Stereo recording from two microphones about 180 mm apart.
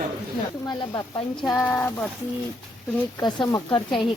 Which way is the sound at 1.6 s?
10° left (ahead or behind).